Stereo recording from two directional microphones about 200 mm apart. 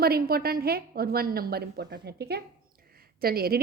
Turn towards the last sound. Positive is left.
turn(degrees=-50)  # may be behind; listen again after turning